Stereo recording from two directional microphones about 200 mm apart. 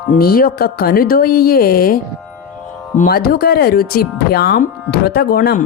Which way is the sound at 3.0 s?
50° left (ahead or behind).